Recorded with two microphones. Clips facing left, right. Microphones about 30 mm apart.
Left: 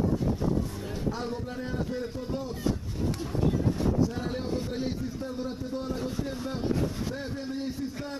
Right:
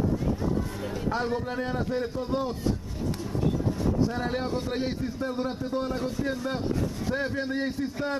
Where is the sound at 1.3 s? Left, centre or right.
Right.